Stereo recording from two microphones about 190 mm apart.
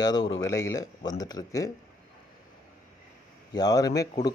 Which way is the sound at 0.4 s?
15° left (ahead or behind).